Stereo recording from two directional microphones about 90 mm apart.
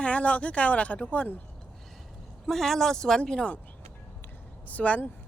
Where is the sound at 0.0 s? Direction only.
15° left (ahead or behind).